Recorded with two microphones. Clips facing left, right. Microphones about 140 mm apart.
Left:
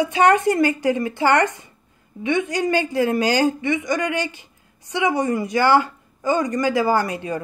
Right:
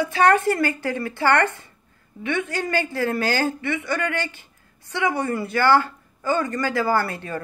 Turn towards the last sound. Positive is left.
turn(degrees=15)  # may be behind; listen again after turning